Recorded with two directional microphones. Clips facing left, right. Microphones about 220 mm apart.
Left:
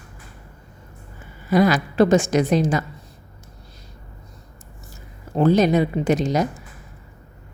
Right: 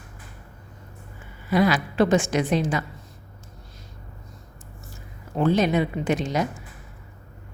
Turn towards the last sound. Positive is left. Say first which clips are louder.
# left 4 dB
turn(degrees=40)  # may be behind; listen again after turning